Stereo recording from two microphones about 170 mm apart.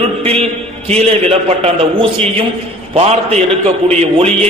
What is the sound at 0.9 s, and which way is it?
A man's voice, 40° right (ahead or behind).